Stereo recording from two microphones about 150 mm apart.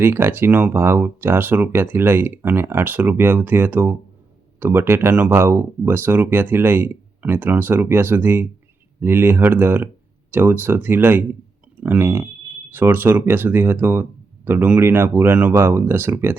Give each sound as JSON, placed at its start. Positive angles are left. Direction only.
{"t": 0.0, "sound": "speech", "side_deg": -15}